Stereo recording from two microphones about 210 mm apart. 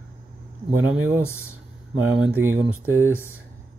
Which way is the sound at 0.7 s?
10° right (ahead or behind).